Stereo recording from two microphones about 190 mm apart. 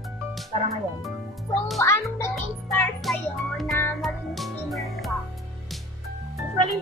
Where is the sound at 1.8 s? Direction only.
15° left (ahead or behind).